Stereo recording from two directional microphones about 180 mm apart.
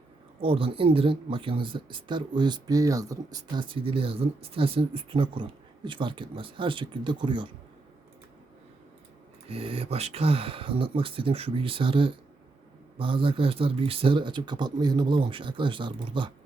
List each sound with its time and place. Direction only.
0.3 s speech: 30° right (ahead or behind)
9.5 s speech: 30° right (ahead or behind)